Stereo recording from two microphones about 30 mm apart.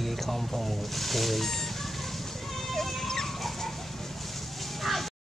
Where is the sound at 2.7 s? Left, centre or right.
Centre.